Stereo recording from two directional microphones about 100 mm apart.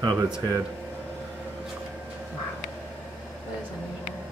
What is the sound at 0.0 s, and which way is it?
Speech, 40° right (ahead or behind).